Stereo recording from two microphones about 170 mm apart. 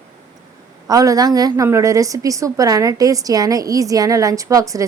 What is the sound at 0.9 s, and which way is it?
A woman's voice, 20° right (ahead or behind).